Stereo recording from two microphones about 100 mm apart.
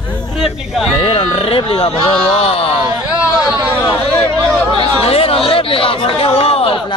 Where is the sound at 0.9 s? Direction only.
70° left (ahead or behind).